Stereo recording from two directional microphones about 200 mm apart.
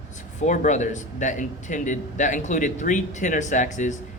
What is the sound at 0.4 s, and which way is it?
Speech, 40° left (ahead or behind).